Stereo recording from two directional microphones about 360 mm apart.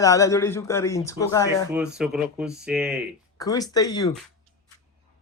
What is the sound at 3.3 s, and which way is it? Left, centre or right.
Speech, centre.